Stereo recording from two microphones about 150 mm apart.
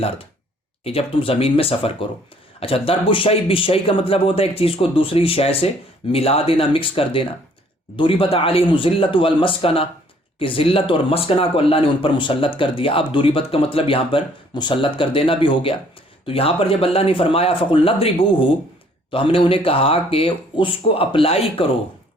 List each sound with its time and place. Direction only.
0.9 s speech: 40° left (ahead or behind)